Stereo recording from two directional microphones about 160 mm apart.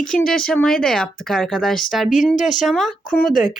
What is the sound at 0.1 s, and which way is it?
Speech, 5° left (ahead or behind).